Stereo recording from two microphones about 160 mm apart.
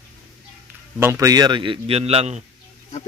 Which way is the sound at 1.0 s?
20° right (ahead or behind).